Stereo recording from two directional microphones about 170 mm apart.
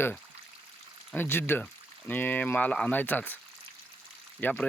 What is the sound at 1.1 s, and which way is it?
Speech, 10° left (ahead or behind).